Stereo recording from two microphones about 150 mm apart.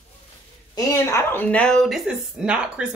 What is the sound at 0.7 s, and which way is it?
Speech, 20° left (ahead or behind).